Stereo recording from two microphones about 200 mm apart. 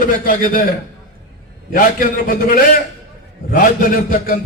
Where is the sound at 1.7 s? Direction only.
45° left (ahead or behind).